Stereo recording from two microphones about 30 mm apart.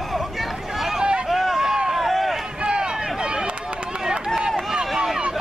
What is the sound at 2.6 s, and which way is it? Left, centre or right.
Run, right.